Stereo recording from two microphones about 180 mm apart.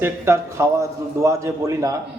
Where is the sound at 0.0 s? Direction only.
15° right (ahead or behind).